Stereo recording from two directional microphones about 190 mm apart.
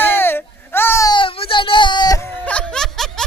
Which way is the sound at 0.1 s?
10° left (ahead or behind).